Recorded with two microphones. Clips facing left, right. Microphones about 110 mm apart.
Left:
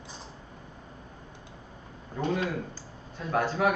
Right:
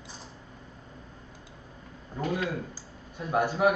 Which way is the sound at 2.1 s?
30° left (ahead or behind).